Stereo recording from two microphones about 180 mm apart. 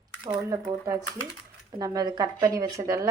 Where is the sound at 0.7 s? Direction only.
20° right (ahead or behind).